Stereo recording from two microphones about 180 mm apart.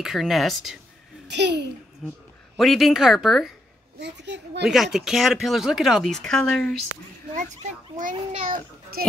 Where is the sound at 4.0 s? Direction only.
70° right (ahead or behind).